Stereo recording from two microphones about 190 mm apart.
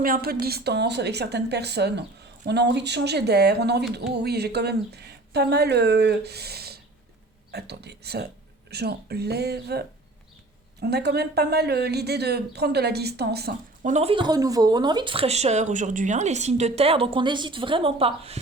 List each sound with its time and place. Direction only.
0.0 s speech: 50° right (ahead or behind)
10.8 s speech: 60° right (ahead or behind)
13.8 s speech: 35° right (ahead or behind)